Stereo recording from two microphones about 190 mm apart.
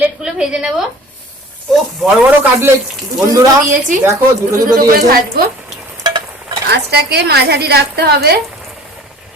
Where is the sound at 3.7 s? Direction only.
45° right (ahead or behind).